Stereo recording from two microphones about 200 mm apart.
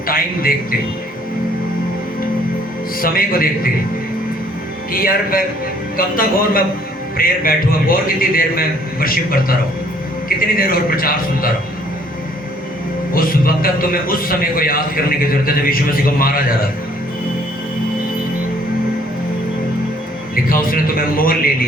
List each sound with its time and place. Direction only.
0.1 s a man's voice: 45° left (ahead or behind)
3.0 s a man's voice: 45° left (ahead or behind)
4.9 s a man's voice: 45° left (ahead or behind)
13.1 s a man's voice: 45° left (ahead or behind)
20.3 s a man's voice: 45° left (ahead or behind)